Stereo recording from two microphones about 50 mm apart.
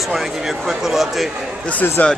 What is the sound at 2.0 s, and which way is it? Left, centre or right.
Speech, left.